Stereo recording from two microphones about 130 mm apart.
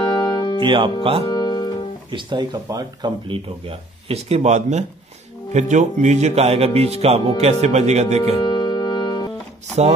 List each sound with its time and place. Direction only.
0.0 s music: 35° left (ahead or behind)
0.6 s speech: 40° right (ahead or behind)
1.2 s music: 35° left (ahead or behind)
2.0 s speech: 35° right (ahead or behind); by 8.2 s 60° right (ahead or behind)
8.4 s music: 35° left (ahead or behind)